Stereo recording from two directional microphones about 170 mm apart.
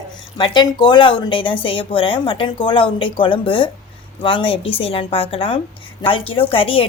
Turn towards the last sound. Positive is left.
turn(degrees=30)  # may be behind; listen again after turning